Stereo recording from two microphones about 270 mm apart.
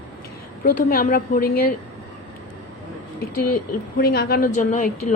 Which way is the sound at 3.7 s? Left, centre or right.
Left.